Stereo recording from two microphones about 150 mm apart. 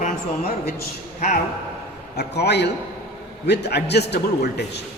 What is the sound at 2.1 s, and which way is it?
Speech, 90° left.